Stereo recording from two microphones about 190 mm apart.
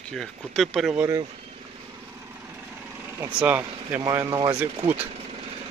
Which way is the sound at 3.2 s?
10° right (ahead or behind).